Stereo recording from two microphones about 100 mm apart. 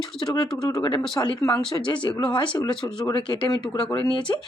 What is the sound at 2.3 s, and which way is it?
Speech, 55° left (ahead or behind).